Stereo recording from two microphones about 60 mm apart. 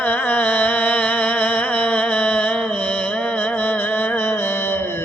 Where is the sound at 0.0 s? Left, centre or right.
Left.